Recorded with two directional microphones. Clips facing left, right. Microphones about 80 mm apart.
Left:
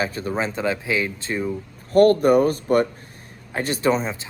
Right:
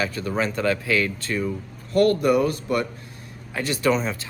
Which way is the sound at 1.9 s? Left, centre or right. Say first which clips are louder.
Left 4 dB; left.